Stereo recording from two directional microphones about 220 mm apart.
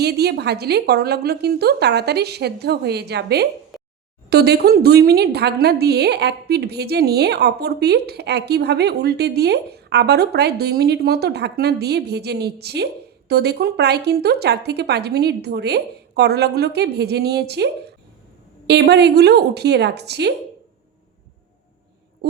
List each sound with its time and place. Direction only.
0.0 s a woman's voice: 45° right (ahead or behind)